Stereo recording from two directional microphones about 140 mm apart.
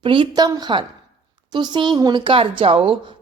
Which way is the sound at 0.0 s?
35° right (ahead or behind).